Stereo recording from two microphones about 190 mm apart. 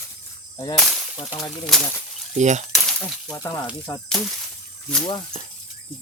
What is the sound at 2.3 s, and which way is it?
Speech, 40° right (ahead or behind).